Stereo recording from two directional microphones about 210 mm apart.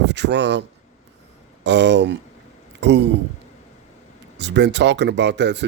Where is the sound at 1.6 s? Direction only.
55° right (ahead or behind).